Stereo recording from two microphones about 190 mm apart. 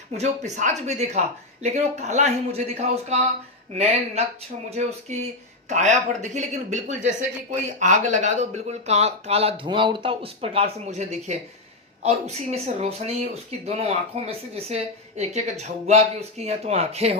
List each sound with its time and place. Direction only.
0.1 s speech: 40° right (ahead or behind)
4.7 s speech: 35° right (ahead or behind)